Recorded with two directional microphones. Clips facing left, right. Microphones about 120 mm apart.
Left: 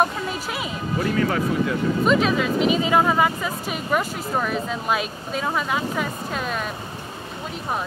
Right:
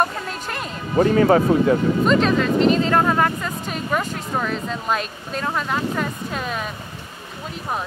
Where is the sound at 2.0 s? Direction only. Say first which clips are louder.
Right 1 dB; 5° left (ahead or behind).